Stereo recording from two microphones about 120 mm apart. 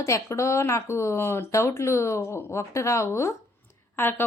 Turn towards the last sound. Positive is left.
turn(degrees=20)  # may be behind; listen again after turning